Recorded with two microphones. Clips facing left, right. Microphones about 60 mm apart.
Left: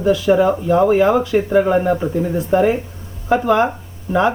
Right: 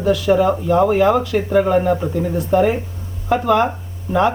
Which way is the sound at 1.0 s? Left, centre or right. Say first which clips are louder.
Left 1 dB; left.